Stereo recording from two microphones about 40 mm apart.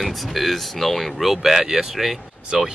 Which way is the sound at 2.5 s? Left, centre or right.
Right.